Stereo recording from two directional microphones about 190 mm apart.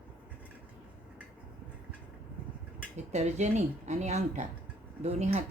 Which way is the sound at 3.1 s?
35° right (ahead or behind).